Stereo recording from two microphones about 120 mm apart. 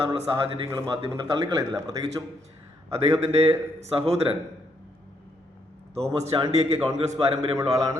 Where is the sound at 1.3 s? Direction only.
35° right (ahead or behind).